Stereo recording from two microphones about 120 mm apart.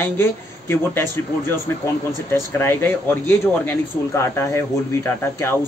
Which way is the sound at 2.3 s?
20° left (ahead or behind).